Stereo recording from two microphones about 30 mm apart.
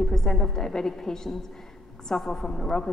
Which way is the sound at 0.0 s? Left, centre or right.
Centre.